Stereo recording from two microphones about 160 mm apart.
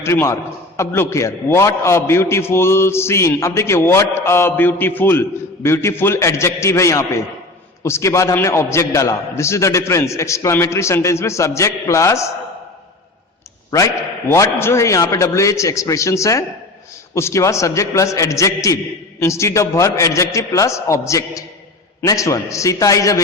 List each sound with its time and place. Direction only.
0.0 s a man's voice: 20° left (ahead or behind)
13.7 s a man's voice: 20° left (ahead or behind)